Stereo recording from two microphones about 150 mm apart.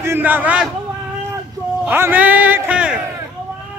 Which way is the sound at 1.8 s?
15° right (ahead or behind).